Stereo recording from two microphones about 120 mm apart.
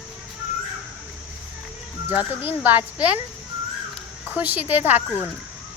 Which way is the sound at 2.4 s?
15° right (ahead or behind).